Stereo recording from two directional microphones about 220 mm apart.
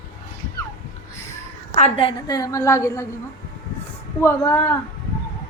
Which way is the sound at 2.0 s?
20° left (ahead or behind).